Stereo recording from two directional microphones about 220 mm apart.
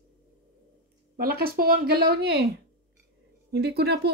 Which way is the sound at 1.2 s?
45° right (ahead or behind).